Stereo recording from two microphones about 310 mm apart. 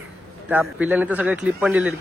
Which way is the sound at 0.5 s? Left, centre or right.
Centre.